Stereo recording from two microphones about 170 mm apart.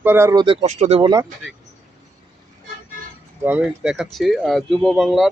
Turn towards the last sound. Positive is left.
turn(degrees=0)  # may be behind; listen again after turning